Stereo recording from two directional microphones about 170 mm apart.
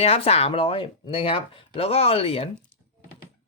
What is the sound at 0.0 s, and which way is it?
Speech, 35° left (ahead or behind).